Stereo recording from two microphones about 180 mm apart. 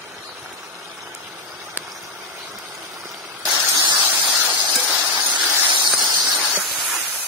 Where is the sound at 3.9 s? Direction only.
10° right (ahead or behind).